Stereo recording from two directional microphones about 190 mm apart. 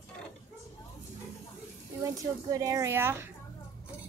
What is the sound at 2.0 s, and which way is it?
Speech, 15° right (ahead or behind).